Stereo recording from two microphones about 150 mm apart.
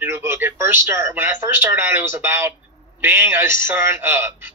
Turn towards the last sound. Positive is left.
turn(degrees=-15)  # may be behind; listen again after turning